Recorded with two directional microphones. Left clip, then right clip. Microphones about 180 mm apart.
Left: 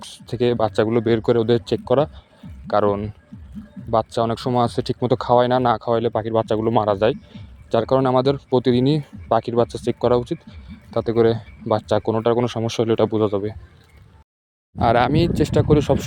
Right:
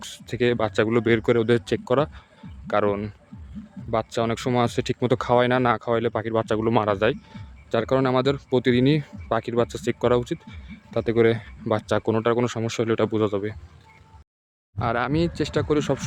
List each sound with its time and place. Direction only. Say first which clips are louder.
0.0 s speech: left 2 dB; 5° left (ahead or behind)
14.8 s speech: left 7 dB; 25° left (ahead or behind)